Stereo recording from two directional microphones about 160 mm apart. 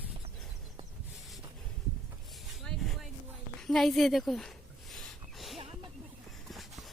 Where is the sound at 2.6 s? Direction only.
Centre (ahead or behind).